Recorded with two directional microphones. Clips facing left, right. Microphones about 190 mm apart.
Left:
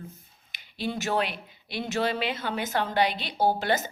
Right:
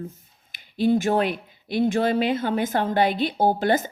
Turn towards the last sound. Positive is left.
turn(degrees=-50)  # may be behind; listen again after turning